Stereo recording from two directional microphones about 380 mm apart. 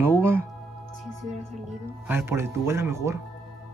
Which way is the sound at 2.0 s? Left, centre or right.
Centre.